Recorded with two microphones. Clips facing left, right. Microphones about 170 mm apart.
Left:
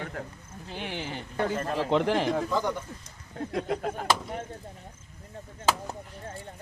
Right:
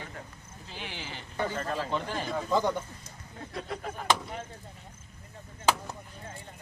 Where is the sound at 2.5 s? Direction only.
20° right (ahead or behind).